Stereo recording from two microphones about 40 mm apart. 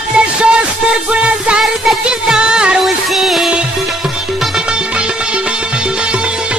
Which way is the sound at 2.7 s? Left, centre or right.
Centre.